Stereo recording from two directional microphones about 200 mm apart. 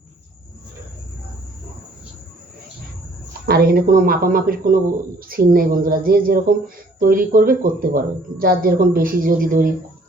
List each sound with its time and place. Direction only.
3.4 s speech: 50° right (ahead or behind)